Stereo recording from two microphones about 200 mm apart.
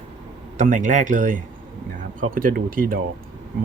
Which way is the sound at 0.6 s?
40° right (ahead or behind).